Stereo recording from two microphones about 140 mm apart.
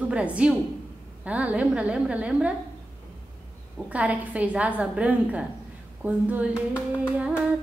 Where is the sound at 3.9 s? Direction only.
10° right (ahead or behind).